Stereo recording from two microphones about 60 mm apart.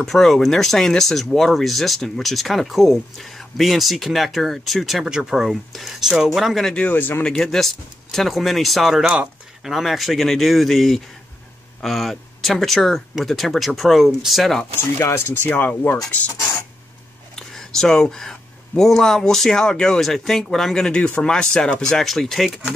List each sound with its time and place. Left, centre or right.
0.0 s speech: centre
6.7 s speech: left
7.3 s speech: centre
15.0 s speech: left
15.4 s speech: left
17.4 s speech: centre